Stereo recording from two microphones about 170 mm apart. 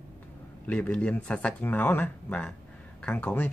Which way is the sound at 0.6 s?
10° left (ahead or behind).